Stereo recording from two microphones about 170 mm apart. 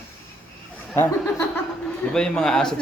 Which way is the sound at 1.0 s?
15° left (ahead or behind).